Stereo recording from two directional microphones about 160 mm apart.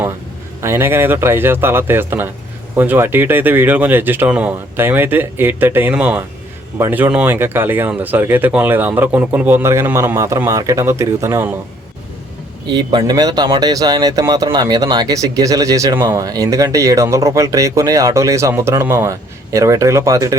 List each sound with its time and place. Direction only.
0.6 s speech: 15° right (ahead or behind)
12.7 s speech: 30° right (ahead or behind)